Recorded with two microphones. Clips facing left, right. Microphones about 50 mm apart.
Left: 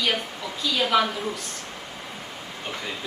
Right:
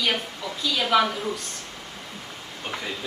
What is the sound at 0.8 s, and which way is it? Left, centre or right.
Speech, centre.